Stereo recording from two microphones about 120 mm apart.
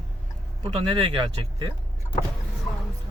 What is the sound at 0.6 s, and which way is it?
Speech, 50° right (ahead or behind).